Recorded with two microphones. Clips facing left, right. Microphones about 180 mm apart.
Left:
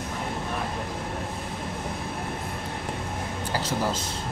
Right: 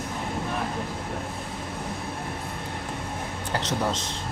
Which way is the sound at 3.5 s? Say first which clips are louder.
Right 1 dB; 5° left (ahead or behind).